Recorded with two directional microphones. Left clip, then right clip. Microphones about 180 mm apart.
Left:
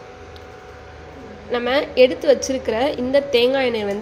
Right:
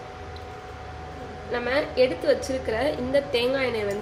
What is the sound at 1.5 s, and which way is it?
A woman's voice, 45° left (ahead or behind).